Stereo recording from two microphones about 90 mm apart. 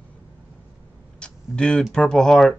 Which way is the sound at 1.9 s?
5° left (ahead or behind).